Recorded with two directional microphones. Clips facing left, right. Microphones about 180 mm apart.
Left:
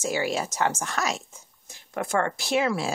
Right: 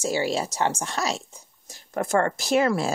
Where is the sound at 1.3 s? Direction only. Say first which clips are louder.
Right 2 dB; 40° right (ahead or behind).